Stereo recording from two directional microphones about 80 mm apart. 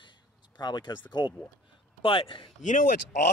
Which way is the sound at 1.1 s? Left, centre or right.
Left.